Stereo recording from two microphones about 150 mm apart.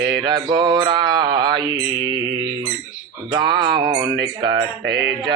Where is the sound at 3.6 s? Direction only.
90° right.